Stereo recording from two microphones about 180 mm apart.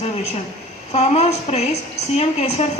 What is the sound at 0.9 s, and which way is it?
Speech, 35° left (ahead or behind).